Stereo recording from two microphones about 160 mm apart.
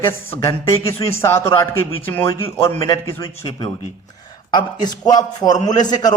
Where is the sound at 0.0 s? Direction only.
15° left (ahead or behind).